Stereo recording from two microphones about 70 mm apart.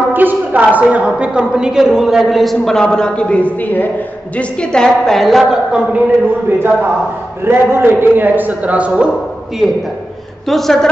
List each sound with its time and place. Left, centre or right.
0.1 s a woman's voice: right; by 3.9 s left
4.4 s a woman's voice: centre
6.2 s a man's voice: right
10.5 s a woman's voice: centre